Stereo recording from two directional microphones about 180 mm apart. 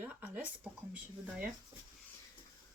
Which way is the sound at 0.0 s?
10° right (ahead or behind).